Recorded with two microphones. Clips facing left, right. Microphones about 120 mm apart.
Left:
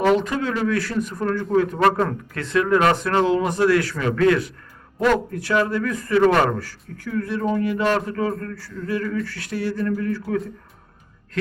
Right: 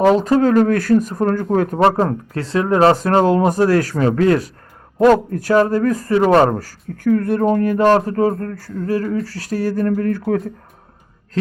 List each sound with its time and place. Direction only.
0.0 s speech: 35° right (ahead or behind)
1.8 s speech: 30° right (ahead or behind); by 10.4 s 55° right (ahead or behind)